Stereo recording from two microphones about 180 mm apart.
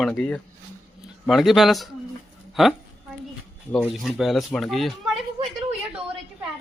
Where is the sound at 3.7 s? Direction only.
5° left (ahead or behind).